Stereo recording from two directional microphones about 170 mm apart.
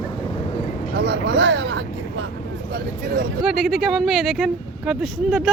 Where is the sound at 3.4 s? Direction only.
5° right (ahead or behind).